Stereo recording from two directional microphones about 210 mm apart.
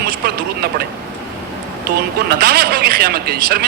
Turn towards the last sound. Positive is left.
turn(degrees=-45)  # may be behind; listen again after turning